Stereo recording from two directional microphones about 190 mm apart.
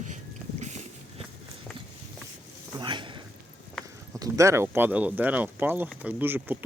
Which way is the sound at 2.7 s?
25° right (ahead or behind).